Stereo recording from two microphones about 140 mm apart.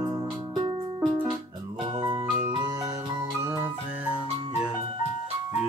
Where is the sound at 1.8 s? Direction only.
35° right (ahead or behind).